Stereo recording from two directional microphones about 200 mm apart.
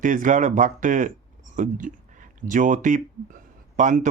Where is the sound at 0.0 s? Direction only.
40° right (ahead or behind).